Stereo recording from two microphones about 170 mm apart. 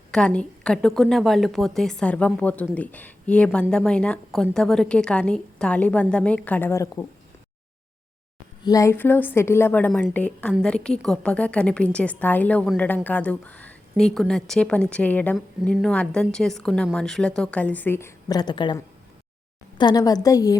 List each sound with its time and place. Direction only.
0.1 s a woman's voice: 5° left (ahead or behind)
8.6 s a woman's voice: 20° left (ahead or behind)
19.8 s a woman's voice: 25° left (ahead or behind)